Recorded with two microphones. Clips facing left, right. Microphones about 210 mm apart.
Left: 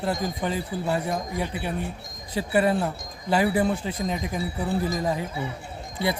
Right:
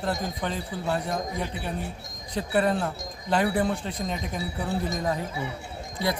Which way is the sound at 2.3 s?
5° left (ahead or behind).